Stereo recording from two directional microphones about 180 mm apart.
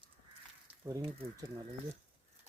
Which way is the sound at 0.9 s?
20° right (ahead or behind).